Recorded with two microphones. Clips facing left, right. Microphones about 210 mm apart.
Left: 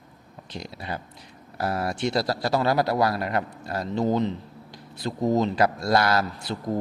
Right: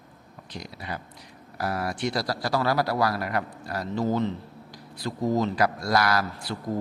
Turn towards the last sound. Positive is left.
turn(degrees=25)  # may be behind; listen again after turning